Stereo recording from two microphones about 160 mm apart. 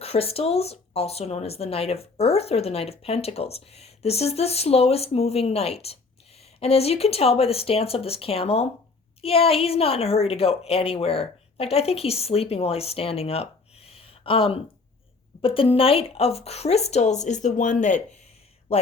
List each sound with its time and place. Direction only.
0.0 s speech: 40° left (ahead or behind)